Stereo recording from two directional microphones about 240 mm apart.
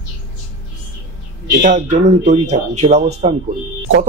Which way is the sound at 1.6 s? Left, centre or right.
Right.